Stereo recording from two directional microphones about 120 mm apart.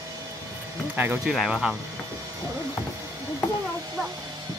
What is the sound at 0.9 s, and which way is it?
Speech, 15° right (ahead or behind).